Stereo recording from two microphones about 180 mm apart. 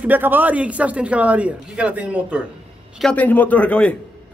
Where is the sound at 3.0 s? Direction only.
10° left (ahead or behind).